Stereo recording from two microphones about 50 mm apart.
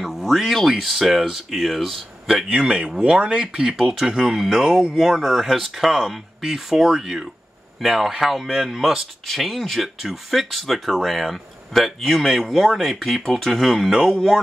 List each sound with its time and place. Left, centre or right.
0.0 s speech: centre
2.5 s speech: centre